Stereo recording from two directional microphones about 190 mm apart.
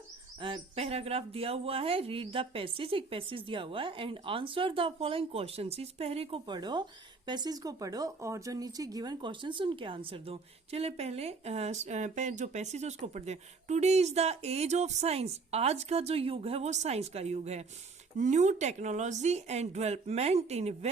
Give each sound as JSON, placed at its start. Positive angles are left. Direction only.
{"t": 0.3, "sound": "speech", "side_deg": -30}